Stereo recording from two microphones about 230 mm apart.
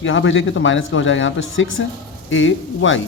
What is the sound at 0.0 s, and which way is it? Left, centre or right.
Speech, left.